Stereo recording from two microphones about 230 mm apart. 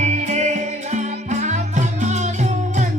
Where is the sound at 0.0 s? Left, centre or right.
Right.